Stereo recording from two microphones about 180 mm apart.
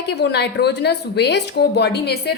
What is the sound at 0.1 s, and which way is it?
A woman's voice, 65° left (ahead or behind).